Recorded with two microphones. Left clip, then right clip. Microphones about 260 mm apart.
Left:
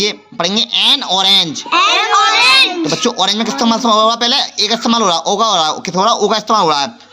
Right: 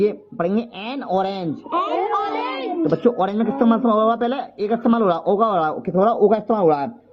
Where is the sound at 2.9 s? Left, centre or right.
Centre.